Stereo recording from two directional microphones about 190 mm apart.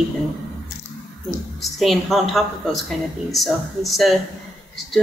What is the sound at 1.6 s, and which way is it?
A woman's voice, centre (ahead or behind).